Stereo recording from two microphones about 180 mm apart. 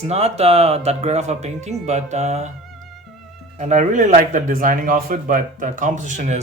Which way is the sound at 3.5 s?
40° right (ahead or behind).